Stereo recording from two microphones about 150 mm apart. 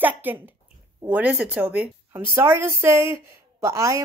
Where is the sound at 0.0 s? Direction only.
10° right (ahead or behind).